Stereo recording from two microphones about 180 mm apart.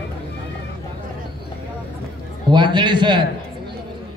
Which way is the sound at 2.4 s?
25° right (ahead or behind).